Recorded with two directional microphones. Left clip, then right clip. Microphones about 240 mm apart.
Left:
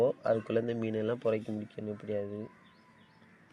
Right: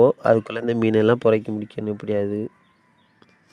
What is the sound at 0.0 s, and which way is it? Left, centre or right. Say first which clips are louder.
Speech: right 13 dB; right.